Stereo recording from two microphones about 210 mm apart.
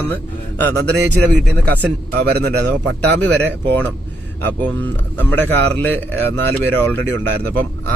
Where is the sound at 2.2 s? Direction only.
50° right (ahead or behind).